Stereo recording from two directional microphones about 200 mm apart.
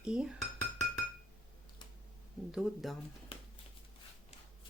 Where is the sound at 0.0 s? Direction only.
5° right (ahead or behind).